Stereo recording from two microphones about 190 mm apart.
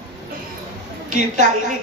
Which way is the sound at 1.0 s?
40° right (ahead or behind).